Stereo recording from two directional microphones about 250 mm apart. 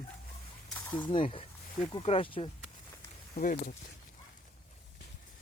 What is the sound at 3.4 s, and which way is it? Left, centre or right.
Speech, left.